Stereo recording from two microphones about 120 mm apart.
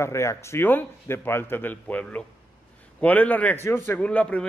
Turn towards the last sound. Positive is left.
turn(degrees=10)  # may be behind; listen again after turning